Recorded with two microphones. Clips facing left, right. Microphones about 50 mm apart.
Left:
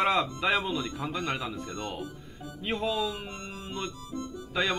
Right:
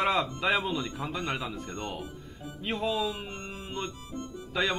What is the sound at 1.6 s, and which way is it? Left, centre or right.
Speech, centre.